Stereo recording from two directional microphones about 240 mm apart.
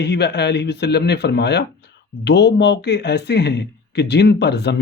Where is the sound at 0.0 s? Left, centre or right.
Left.